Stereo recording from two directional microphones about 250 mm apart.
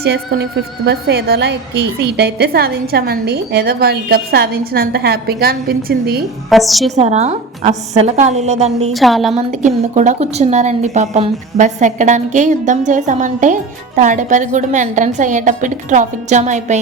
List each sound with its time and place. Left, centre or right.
0.0 s a woman's voice: right
6.5 s a woman's voice: centre
6.9 s speech: right
8.9 s a woman's voice: centre
9.3 s speech: right